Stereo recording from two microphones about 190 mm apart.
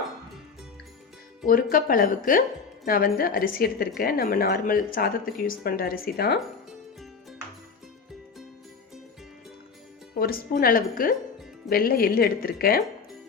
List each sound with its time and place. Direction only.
1.7 s a woman's voice: 50° left (ahead or behind)
10.2 s a woman's voice: 50° left (ahead or behind)